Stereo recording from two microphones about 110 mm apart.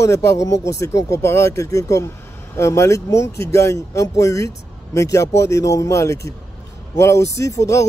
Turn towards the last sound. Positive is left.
turn(degrees=30)  # may be behind; listen again after turning